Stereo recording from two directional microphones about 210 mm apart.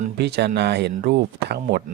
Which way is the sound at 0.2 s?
50° right (ahead or behind).